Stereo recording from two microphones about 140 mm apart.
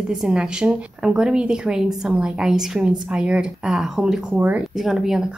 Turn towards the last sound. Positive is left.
turn(degrees=-5)  # may be behind; listen again after turning